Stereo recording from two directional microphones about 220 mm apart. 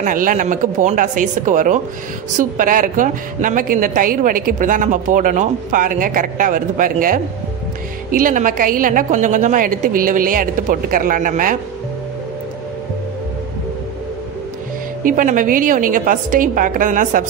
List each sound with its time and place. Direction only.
0.0 s a woman's voice: 40° right (ahead or behind)
15.0 s a woman's voice: 35° right (ahead or behind)